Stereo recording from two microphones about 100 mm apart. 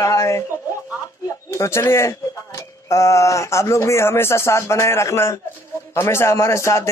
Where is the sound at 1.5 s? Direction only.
30° left (ahead or behind).